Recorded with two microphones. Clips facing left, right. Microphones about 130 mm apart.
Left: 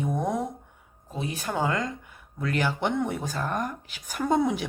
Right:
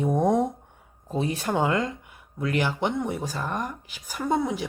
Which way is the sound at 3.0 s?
5° right (ahead or behind).